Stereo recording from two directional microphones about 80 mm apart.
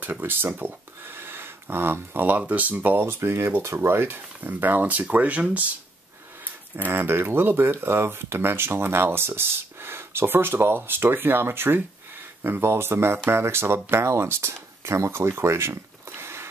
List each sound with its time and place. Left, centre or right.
0.0 s speech: right
6.8 s speech: right